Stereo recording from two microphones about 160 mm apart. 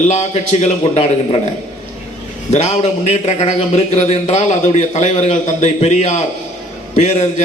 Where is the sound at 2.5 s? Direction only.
45° left (ahead or behind).